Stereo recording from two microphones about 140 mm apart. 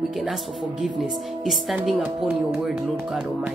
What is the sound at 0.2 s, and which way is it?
Speech, centre (ahead or behind).